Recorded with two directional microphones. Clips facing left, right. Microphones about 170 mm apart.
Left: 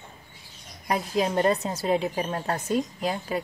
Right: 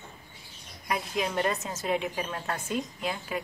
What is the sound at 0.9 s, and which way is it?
Speech, 35° left (ahead or behind).